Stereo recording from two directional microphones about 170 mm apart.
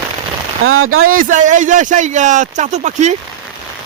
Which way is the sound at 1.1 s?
50° right (ahead or behind).